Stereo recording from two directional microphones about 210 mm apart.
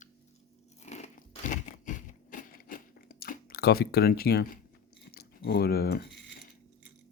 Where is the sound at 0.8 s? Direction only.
30° left (ahead or behind); by 6.0 s 50° left (ahead or behind).